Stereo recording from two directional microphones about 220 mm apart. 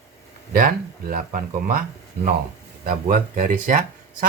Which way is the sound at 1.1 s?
40° right (ahead or behind).